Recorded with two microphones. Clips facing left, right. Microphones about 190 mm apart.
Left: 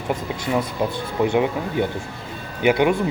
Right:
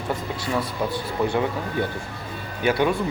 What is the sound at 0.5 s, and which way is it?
Speech, 20° left (ahead or behind).